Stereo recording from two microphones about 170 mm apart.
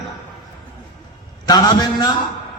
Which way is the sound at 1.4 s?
25° left (ahead or behind).